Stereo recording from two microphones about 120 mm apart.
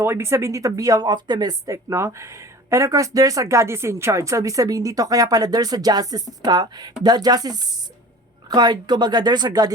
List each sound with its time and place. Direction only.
0.0 s speech: 20° right (ahead or behind)